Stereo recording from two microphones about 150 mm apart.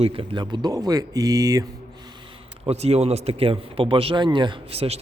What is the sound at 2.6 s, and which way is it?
Speech, 45° right (ahead or behind).